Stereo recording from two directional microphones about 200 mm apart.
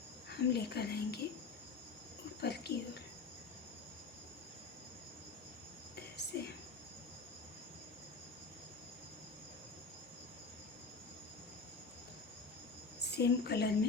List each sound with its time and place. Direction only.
0.3 s speech: 55° left (ahead or behind)
2.4 s speech: 55° left (ahead or behind)
6.0 s whispering: 55° left (ahead or behind)
13.1 s a woman's voice: 55° left (ahead or behind)